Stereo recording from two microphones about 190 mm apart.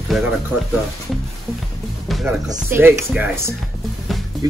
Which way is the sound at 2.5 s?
10° right (ahead or behind).